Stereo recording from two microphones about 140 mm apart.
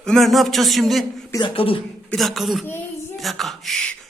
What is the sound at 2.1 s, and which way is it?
Speech, centre (ahead or behind).